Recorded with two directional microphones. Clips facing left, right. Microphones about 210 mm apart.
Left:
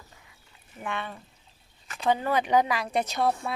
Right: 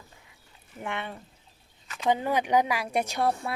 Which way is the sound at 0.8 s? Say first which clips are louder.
Even; 25° right (ahead or behind).